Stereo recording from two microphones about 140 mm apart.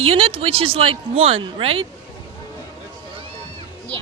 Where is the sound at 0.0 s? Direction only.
40° right (ahead or behind).